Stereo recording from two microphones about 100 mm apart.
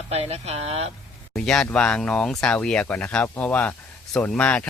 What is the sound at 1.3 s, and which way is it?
A man's voice, 5° left (ahead or behind).